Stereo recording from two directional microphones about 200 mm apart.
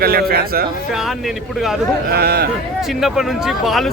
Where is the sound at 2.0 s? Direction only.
50° right (ahead or behind).